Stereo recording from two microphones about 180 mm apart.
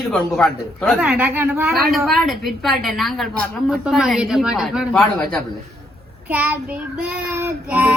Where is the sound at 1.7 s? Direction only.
Centre (ahead or behind).